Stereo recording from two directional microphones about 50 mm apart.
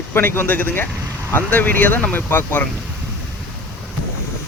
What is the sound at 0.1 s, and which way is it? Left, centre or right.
Speech, left.